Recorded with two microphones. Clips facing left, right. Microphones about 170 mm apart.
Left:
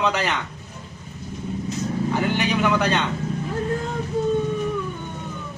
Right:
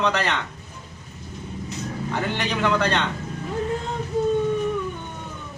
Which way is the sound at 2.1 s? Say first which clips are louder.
Left 3 dB; 10° left (ahead or behind).